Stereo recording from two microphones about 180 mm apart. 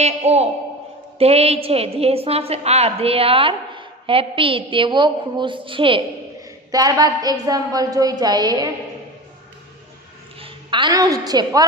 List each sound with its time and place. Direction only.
0.0 s a woman's voice: 35° right (ahead or behind)
10.4 s a woman's voice: 25° right (ahead or behind)